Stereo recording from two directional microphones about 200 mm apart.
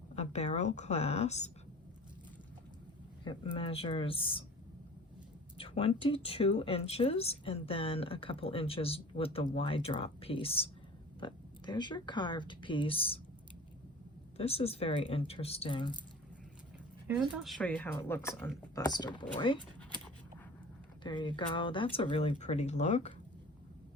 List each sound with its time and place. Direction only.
0.2 s a woman's voice: 35° left (ahead or behind)
3.2 s speech: 25° left (ahead or behind)
5.5 s speech: 30° left (ahead or behind)
14.3 s speech: 30° left (ahead or behind)
17.2 s speech: centre (ahead or behind); by 19.5 s 25° left (ahead or behind)
21.0 s speech: 25° left (ahead or behind)